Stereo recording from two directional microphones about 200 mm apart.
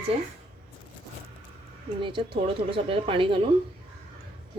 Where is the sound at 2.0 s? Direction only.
25° right (ahead or behind).